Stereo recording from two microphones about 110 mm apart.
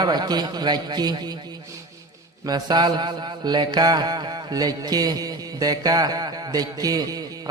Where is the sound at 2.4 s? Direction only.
40° right (ahead or behind).